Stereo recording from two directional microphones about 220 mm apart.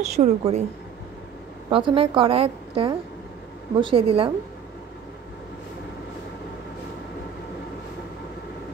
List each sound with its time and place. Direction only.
0.0 s a woman's voice: 30° right (ahead or behind)
1.7 s a woman's voice: 25° right (ahead or behind)